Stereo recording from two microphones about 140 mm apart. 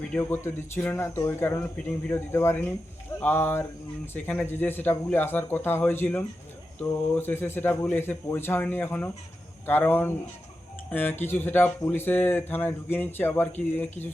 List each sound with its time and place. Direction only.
0.2 s speech: 15° left (ahead or behind)